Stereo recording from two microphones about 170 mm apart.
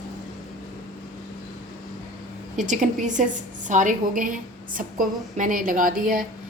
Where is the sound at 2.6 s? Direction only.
45° right (ahead or behind).